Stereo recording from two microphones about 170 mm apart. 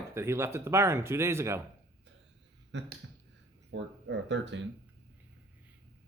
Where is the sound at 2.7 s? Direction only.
90° right.